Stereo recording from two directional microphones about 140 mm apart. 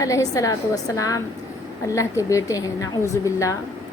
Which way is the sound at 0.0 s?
25° left (ahead or behind).